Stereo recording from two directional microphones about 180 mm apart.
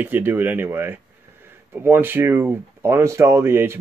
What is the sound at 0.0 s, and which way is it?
Speech, 10° right (ahead or behind).